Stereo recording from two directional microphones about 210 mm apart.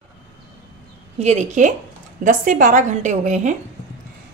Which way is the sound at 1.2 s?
35° right (ahead or behind).